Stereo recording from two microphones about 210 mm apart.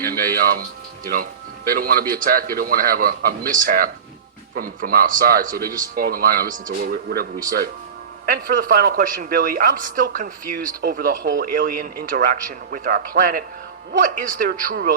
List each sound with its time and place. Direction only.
0.0 s a woman's voice: 45° right (ahead or behind)